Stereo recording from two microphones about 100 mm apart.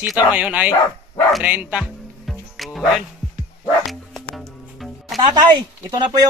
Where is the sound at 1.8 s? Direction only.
Centre (ahead or behind).